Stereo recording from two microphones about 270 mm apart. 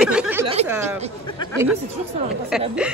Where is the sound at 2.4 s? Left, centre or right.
Centre.